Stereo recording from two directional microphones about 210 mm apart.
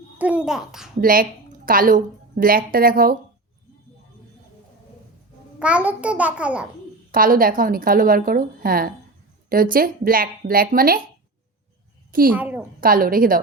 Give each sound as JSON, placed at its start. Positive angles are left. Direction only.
{"t": 0.2, "sound": "a child's voice", "side_deg": -5}
{"t": 1.0, "sound": "a woman's voice", "side_deg": -40}
{"t": 5.5, "sound": "a child's voice", "side_deg": -5}
{"t": 7.1, "sound": "a woman's voice", "side_deg": -40}
{"t": 12.3, "sound": "a woman's voice", "side_deg": -10}
{"t": 12.8, "sound": "a woman's voice", "side_deg": -45}